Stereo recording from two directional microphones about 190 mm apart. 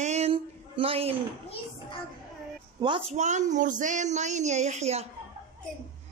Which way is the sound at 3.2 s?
40° right (ahead or behind).